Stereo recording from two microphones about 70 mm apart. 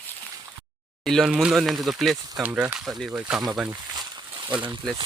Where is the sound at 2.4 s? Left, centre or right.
Right.